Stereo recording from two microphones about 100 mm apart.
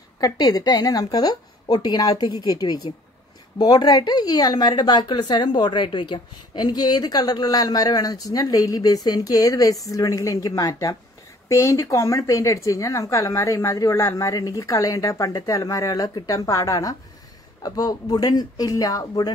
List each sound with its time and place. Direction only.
0.2 s a woman's voice: 40° left (ahead or behind)